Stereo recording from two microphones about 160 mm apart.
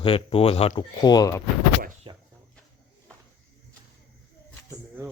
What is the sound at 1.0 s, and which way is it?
Speech, 25° left (ahead or behind).